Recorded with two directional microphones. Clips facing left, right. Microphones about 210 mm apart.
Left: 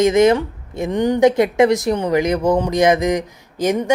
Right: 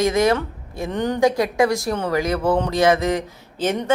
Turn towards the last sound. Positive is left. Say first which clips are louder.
# left 4 dB
turn(degrees=10)  # may be behind; listen again after turning